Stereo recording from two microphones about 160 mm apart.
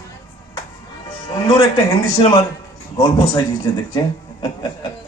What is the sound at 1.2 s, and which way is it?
Music, 25° left (ahead or behind).